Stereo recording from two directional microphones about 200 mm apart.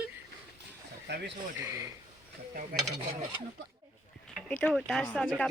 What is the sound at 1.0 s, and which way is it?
Speech, 55° right (ahead or behind).